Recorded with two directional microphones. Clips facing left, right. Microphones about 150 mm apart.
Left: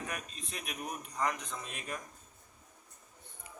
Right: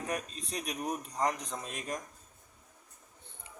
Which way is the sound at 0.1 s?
35° right (ahead or behind).